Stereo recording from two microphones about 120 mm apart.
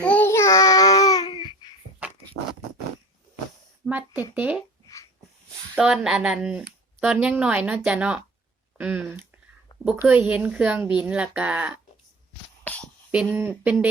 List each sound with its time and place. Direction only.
0.0 s child singing: 10° left (ahead or behind)
0.3 s child singing: 25° left (ahead or behind); by 1.7 s 40° left (ahead or behind)
3.8 s a sound: 15° right (ahead or behind)
4.4 s speech: 15° right (ahead or behind)
5.7 s speech: 5° right (ahead or behind)
12.6 s a sound: 10° left (ahead or behind)
13.3 s speech: 15° right (ahead or behind)